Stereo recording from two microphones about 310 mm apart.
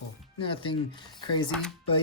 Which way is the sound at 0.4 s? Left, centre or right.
Centre.